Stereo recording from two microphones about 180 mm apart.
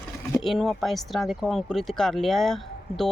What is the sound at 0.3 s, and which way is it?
Speech, centre (ahead or behind).